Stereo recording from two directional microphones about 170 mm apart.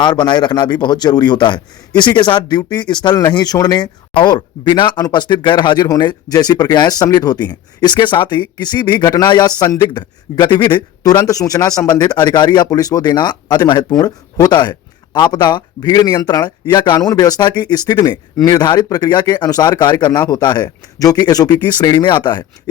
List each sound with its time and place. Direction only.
0.0 s a man's voice: 25° left (ahead or behind)